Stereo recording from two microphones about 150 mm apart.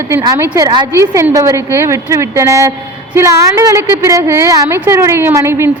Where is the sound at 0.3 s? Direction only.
20° right (ahead or behind).